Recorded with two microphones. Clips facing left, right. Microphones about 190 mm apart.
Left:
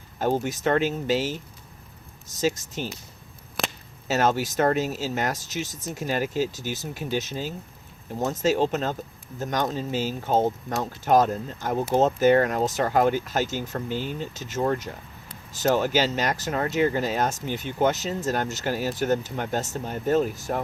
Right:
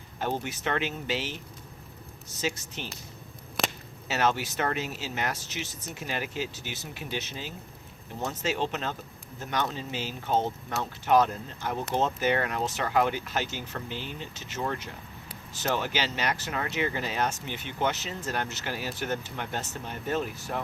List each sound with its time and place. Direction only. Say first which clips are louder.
0.2 s speech: left 7 dB; 45° left (ahead or behind)
3.6 s whip: even; centre (ahead or behind)
4.1 s speech: left 5 dB; 45° left (ahead or behind)